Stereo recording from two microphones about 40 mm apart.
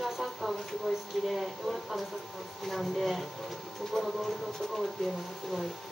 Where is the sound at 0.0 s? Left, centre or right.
Centre.